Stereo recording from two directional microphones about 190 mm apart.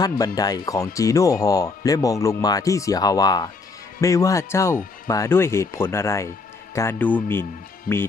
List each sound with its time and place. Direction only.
0.3 s speech: 20° left (ahead or behind)
7.9 s speech: 50° left (ahead or behind)